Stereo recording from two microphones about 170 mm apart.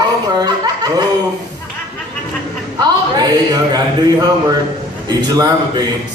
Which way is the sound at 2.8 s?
25° right (ahead or behind).